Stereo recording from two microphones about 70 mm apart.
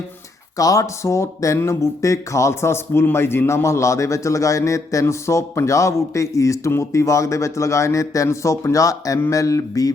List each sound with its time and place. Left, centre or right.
0.5 s a man's voice: left